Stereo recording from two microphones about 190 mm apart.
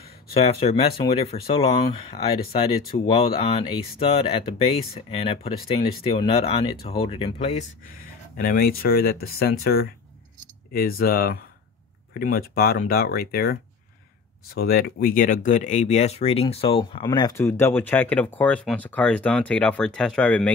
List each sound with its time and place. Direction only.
0.3 s speech: 30° left (ahead or behind)
8.0 s speech: 50° left (ahead or behind); by 20.5 s 5° left (ahead or behind)